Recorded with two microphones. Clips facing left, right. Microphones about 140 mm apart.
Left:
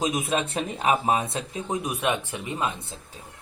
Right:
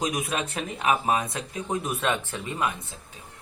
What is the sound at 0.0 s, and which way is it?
Speech, 25° left (ahead or behind).